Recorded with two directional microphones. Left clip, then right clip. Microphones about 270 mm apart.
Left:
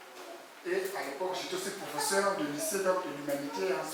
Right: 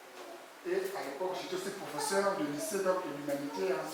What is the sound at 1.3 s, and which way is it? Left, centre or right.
Speech, centre.